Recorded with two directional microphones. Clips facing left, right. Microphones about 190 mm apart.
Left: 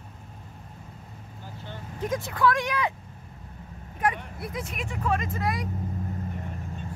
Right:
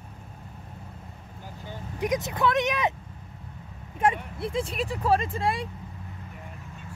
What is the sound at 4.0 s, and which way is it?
Speech, 25° right (ahead or behind).